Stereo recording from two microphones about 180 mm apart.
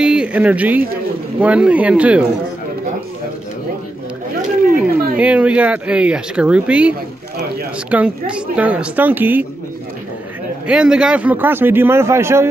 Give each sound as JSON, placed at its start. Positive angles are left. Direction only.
{"t": 0.0, "sound": "a man's voice", "side_deg": -5}
{"t": 4.7, "sound": "a man's voice", "side_deg": -5}
{"t": 10.7, "sound": "a man's voice", "side_deg": -5}